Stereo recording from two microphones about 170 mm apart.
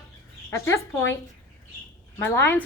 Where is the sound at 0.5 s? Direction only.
15° left (ahead or behind).